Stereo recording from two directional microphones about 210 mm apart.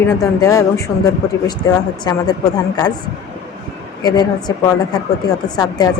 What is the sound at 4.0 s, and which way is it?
Speech, 20° left (ahead or behind).